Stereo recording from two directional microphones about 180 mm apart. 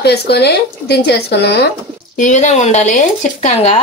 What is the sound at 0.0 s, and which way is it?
Speech, 65° left (ahead or behind).